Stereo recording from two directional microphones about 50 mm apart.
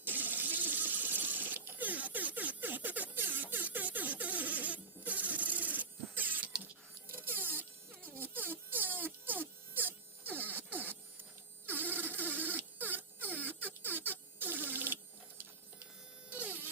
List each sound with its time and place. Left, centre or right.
0.0 s engine: right
7.1 s buzz: right
16.3 s buzz: right